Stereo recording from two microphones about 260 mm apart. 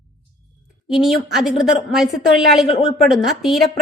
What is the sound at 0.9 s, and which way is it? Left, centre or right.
A woman's voice, centre.